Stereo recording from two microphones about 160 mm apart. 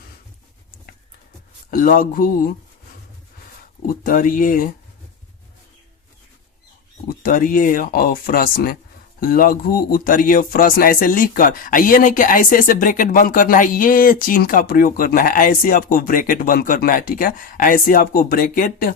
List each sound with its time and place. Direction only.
1.7 s speech: 60° left (ahead or behind)
4.0 s speech: 60° left (ahead or behind)
7.2 s speech: 60° left (ahead or behind)